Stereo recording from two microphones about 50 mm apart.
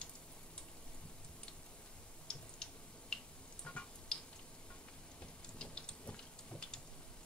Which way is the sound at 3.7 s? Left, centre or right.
Left.